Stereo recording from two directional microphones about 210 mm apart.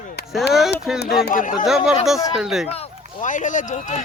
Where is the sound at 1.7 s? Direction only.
Centre (ahead or behind).